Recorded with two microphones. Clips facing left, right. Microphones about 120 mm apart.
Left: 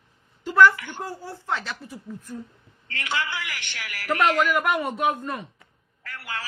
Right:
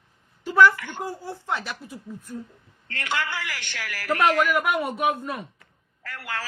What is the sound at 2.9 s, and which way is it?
Speech, 50° right (ahead or behind).